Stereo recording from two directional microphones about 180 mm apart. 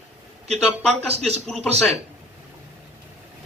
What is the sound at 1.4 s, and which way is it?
Speech, 5° left (ahead or behind).